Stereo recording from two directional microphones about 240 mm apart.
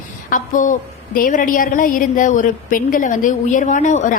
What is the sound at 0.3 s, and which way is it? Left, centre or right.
A woman's voice, left.